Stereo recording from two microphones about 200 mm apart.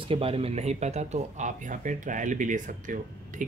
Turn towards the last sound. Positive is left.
turn(degrees=-40)  # may be behind; listen again after turning